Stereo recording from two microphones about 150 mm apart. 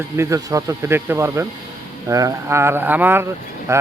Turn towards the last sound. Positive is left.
turn(degrees=-20)  # may be behind; listen again after turning